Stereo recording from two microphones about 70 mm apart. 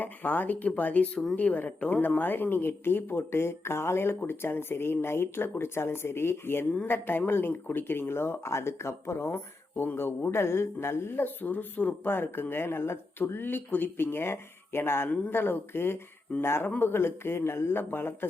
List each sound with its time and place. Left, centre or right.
0.0 s speech: left